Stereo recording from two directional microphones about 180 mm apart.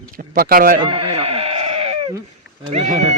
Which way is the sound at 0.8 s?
25° right (ahead or behind).